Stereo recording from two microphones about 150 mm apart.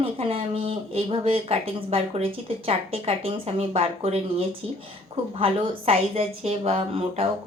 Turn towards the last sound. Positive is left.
turn(degrees=-40)  # may be behind; listen again after turning